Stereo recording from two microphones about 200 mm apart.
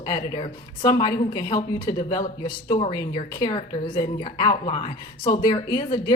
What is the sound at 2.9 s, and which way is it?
A woman's voice, 20° left (ahead or behind).